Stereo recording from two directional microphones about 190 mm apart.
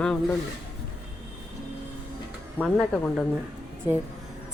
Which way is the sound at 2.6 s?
5° left (ahead or behind).